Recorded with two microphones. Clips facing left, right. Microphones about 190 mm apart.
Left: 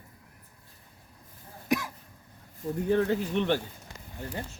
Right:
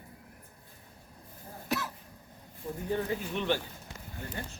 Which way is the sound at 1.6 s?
15° left (ahead or behind).